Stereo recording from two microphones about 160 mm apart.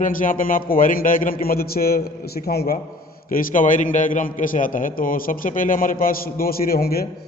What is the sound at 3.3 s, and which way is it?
A man's voice, 60° left (ahead or behind).